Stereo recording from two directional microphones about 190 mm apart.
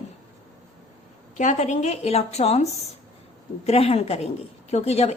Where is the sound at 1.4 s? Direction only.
40° left (ahead or behind).